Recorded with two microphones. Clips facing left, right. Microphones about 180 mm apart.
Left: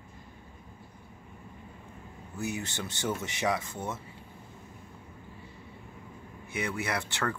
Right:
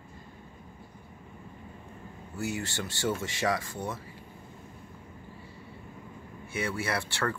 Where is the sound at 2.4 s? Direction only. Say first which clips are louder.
Right 1 dB; 20° left (ahead or behind).